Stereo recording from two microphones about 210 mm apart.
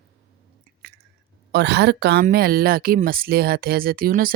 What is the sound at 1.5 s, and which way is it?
Speech, 55° right (ahead or behind).